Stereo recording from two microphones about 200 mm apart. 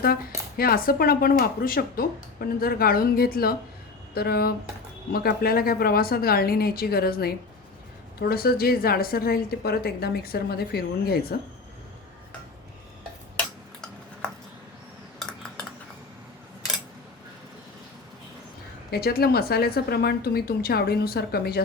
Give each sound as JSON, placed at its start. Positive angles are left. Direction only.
{"t": 0.0, "sound": "speech", "side_deg": 50}
{"t": 15.2, "sound": "cutlery", "side_deg": 5}
{"t": 18.9, "sound": "speech", "side_deg": 50}